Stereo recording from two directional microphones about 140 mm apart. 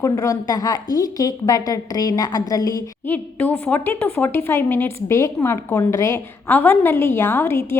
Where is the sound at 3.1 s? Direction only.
10° left (ahead or behind).